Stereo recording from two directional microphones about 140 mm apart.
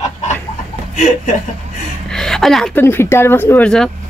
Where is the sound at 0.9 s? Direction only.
60° left (ahead or behind).